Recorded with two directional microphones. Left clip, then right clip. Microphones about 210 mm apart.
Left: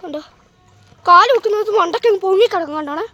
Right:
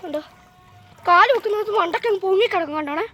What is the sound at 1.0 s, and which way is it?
A woman's voice, 20° left (ahead or behind).